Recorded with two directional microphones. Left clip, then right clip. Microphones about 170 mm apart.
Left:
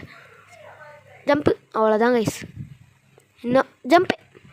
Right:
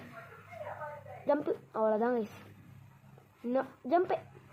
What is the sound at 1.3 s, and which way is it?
Speech, 85° left.